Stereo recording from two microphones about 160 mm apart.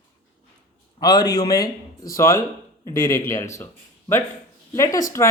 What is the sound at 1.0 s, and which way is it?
Speech, 25° left (ahead or behind).